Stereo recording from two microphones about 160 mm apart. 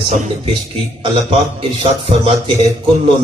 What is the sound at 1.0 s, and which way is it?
Music, 35° right (ahead or behind).